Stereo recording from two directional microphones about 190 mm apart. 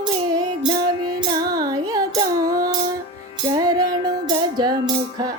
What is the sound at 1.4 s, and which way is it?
Music, 55° right (ahead or behind).